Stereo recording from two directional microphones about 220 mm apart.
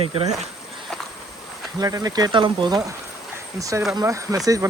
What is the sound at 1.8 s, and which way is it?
Speech, 15° right (ahead or behind).